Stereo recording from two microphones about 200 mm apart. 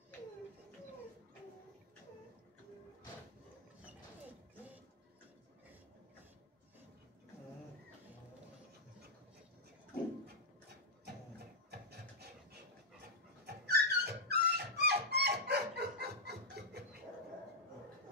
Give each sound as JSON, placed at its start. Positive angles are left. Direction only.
{"t": 11.7, "sound": "filing", "side_deg": -50}
{"t": 13.5, "sound": "dog", "side_deg": -55}